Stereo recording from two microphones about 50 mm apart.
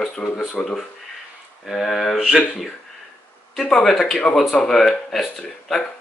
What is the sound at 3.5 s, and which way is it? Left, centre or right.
Speech, centre.